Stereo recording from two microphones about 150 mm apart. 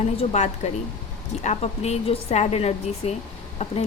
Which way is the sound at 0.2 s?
50° left (ahead or behind).